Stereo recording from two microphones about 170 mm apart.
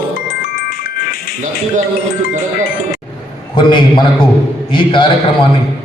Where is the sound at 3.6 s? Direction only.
30° left (ahead or behind).